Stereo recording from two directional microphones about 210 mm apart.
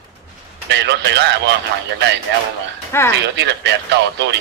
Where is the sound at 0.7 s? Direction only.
55° right (ahead or behind).